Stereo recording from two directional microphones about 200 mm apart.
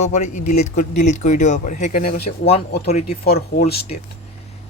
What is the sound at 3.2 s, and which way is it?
Speech, 50° left (ahead or behind).